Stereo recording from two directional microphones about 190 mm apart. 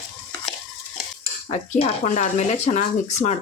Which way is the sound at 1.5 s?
35° left (ahead or behind).